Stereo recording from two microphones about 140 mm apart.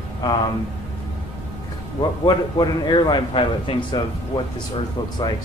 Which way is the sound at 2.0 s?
30° left (ahead or behind).